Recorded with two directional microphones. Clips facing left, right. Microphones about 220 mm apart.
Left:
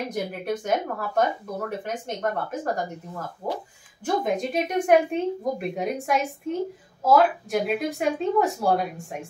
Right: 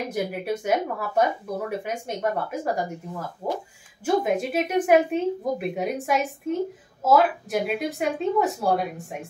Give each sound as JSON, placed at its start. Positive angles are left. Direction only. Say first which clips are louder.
{"t": 0.1, "sound": "a woman's voice", "louder": "right 1 dB", "side_deg": -10}